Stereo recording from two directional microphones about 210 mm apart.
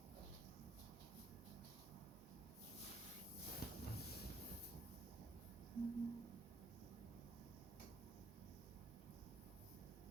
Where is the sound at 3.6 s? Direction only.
50° left (ahead or behind).